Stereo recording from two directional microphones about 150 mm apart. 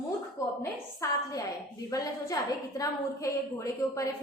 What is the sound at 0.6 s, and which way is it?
A woman's voice, 20° left (ahead or behind).